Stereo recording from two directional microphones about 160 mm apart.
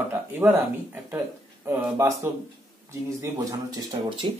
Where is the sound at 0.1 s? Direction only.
15° right (ahead or behind).